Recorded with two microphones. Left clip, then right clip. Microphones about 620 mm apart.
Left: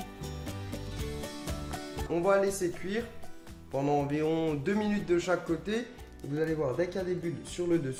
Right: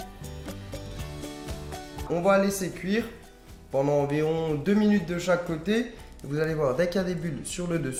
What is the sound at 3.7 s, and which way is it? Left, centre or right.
Speech, left.